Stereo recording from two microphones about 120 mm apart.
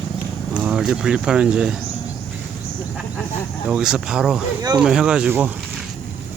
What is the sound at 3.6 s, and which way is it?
Speech, 10° right (ahead or behind).